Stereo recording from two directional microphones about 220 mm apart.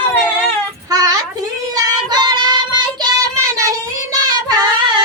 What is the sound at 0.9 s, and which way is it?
Child singing, 15° right (ahead or behind).